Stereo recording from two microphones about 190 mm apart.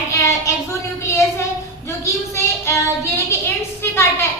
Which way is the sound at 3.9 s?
10° left (ahead or behind).